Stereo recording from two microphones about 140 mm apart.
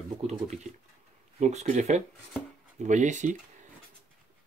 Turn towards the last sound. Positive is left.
turn(degrees=-60)  # may be behind; listen again after turning